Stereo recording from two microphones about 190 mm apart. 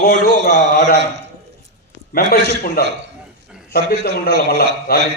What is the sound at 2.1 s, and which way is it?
Speech, 50° left (ahead or behind).